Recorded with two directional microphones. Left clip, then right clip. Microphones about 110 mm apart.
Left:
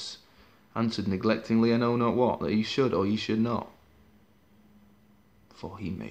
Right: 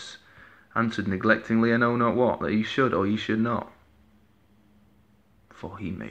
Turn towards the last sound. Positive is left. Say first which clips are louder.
# right 2 dB
turn(degrees=30)  # may be behind; listen again after turning